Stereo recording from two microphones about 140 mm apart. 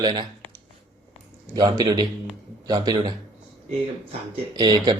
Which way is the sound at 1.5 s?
30° right (ahead or behind).